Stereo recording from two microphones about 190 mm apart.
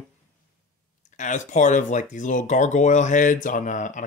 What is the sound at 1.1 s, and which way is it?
Speech, 40° left (ahead or behind).